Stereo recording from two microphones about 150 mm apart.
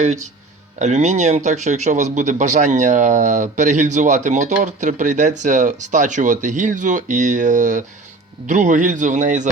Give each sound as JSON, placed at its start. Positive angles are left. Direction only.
{"t": 0.0, "sound": "speech", "side_deg": -50}